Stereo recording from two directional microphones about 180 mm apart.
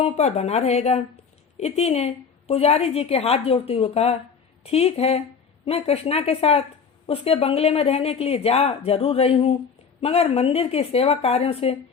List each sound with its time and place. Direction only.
0.0 s a woman's voice: 35° left (ahead or behind)